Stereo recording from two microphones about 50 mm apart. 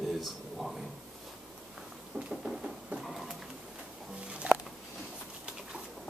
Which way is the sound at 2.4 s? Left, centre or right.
Centre.